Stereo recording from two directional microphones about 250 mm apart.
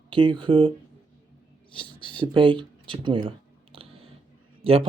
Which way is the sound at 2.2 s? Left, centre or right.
Centre.